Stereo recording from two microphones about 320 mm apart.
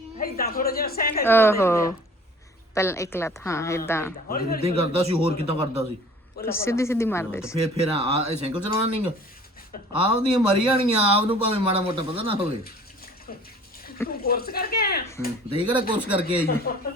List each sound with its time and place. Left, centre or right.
0.2 s a woman's voice: left
1.2 s a woman's voice: centre
4.3 s a woman's voice: left
4.6 s speech: centre
6.5 s a woman's voice: centre
7.5 s speech: centre
14.1 s a woman's voice: left
15.5 s speech: centre
16.0 s speech: centre